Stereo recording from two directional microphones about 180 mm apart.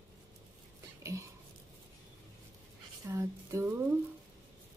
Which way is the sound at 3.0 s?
15° right (ahead or behind).